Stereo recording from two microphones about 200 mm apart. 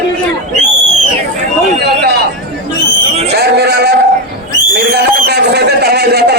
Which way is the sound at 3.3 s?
55° right (ahead or behind).